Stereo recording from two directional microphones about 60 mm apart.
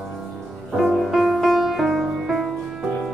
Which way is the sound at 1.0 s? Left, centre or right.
Centre.